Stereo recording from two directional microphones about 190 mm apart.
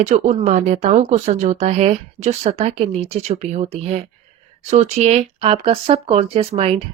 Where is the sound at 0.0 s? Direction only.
35° right (ahead or behind).